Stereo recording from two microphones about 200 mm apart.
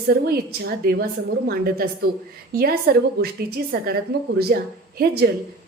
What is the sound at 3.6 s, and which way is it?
A woman's voice, 50° right (ahead or behind).